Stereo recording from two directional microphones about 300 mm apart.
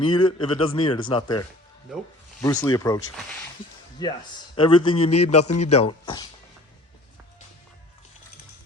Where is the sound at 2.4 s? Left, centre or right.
Centre.